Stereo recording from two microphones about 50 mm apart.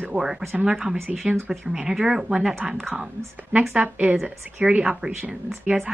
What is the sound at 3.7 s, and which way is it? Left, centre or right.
A woman's voice, right.